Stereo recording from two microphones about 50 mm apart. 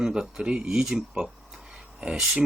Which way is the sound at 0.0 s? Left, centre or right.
Centre.